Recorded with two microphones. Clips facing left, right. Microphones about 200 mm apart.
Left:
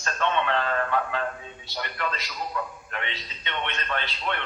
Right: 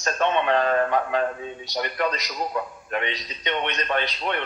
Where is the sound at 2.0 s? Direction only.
15° right (ahead or behind).